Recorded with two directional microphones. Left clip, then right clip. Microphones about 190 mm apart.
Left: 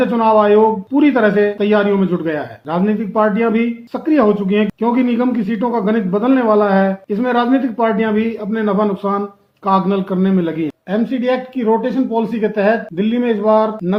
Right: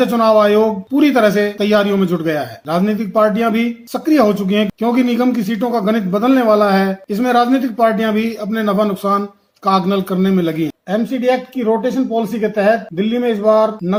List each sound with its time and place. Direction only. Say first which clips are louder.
0.0 s a man's voice: right 1 dB; 45° right (ahead or behind)